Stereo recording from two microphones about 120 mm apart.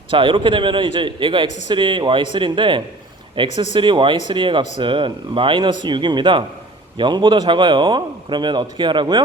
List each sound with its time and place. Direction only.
0.1 s a man's voice: 45° right (ahead or behind)